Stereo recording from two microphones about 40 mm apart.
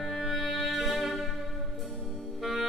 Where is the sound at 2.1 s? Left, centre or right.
Centre.